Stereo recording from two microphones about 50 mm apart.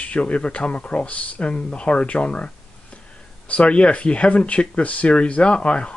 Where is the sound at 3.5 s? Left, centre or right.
Left.